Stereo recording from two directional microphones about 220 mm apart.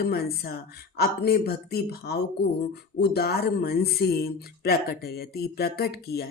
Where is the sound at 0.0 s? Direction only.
45° left (ahead or behind).